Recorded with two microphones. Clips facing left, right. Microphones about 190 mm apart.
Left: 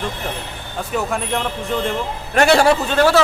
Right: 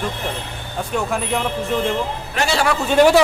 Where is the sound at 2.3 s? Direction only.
55° left (ahead or behind).